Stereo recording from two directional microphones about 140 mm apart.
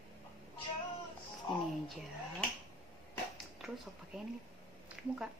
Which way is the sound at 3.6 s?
Centre (ahead or behind).